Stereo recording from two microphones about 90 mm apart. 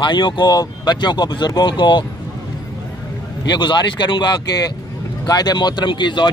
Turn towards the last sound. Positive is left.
turn(degrees=60)  # may be behind; listen again after turning